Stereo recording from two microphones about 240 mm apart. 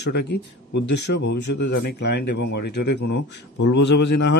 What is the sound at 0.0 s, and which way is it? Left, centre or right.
Speech, left.